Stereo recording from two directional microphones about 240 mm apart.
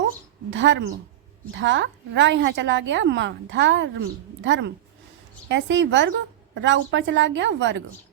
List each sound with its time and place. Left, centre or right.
0.5 s a woman's voice: right